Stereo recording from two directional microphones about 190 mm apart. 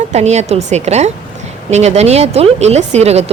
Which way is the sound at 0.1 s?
35° right (ahead or behind).